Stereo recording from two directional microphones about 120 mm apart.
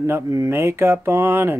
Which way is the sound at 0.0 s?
25° right (ahead or behind).